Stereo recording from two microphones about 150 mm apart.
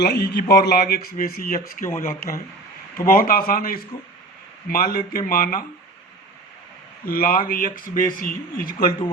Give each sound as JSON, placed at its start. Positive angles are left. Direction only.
{"t": 0.0, "sound": "a man's voice", "side_deg": 90}
{"t": 7.0, "sound": "a man's voice", "side_deg": 80}